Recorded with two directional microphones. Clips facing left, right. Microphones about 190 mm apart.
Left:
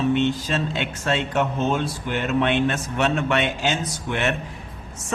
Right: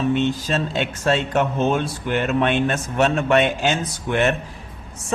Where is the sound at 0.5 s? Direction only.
40° right (ahead or behind).